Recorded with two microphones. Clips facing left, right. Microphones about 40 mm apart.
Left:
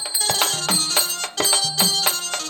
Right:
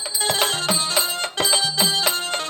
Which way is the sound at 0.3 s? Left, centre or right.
Centre.